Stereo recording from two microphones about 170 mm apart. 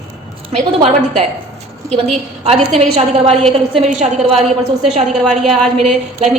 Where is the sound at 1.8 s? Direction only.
40° right (ahead or behind).